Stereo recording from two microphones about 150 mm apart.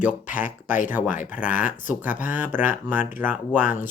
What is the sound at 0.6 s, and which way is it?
Speech, 60° left (ahead or behind).